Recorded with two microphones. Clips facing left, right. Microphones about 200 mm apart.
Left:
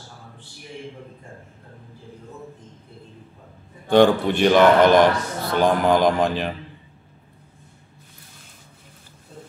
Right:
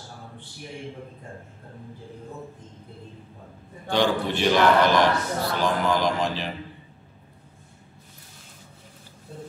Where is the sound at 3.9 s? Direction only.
55° left (ahead or behind).